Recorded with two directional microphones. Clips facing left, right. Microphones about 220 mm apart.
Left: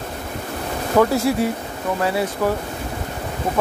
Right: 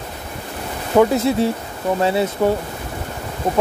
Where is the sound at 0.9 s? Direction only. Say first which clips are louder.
Right 2 dB; 20° right (ahead or behind).